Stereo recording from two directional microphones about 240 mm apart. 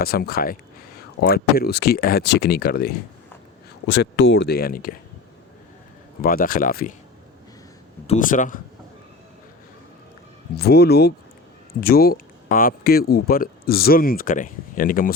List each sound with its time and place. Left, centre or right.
0.0 s speech: left
6.2 s speech: left
8.0 s speech: left
10.5 s speech: left